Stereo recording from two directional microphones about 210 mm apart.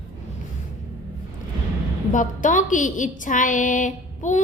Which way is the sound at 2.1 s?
35° left (ahead or behind).